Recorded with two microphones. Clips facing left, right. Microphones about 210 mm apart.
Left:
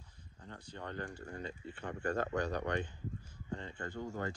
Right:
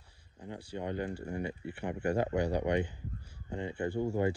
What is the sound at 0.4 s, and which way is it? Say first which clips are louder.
Speech: right 8 dB; 10° right (ahead or behind).